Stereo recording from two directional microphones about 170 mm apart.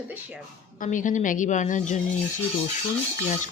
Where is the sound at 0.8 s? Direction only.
50° left (ahead or behind).